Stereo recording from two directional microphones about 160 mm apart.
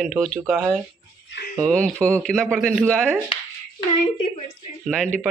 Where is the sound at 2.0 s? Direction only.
5° left (ahead or behind).